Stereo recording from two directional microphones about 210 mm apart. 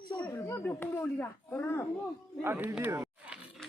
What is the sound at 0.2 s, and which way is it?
Speech, 10° left (ahead or behind).